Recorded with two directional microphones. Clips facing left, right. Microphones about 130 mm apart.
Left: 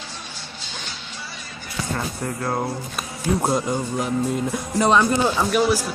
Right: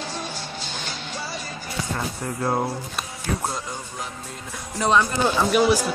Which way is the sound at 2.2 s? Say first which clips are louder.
Right 2 dB; 20° right (ahead or behind).